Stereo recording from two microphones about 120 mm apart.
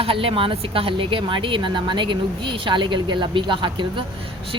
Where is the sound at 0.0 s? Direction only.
50° right (ahead or behind).